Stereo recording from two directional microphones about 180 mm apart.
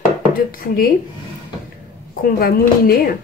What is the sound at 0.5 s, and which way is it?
Speech, 55° left (ahead or behind).